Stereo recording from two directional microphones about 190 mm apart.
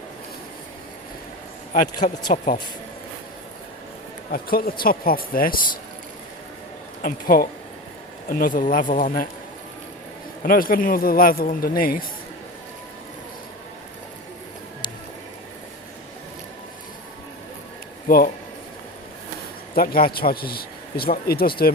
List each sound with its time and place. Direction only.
2.3 s speech: 40° left (ahead or behind)
4.3 s speech: 50° left (ahead or behind)
7.0 s speech: 50° left (ahead or behind)
10.4 s speech: 50° left (ahead or behind)
18.1 s speech: 50° left (ahead or behind)
19.7 s speech: 50° left (ahead or behind)